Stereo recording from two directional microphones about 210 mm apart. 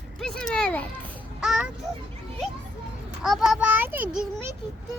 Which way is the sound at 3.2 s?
Centre (ahead or behind).